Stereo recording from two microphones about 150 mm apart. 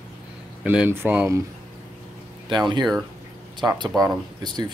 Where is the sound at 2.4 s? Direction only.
30° right (ahead or behind).